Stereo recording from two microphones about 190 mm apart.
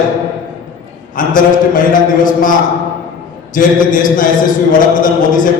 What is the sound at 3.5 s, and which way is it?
Speech, 45° left (ahead or behind).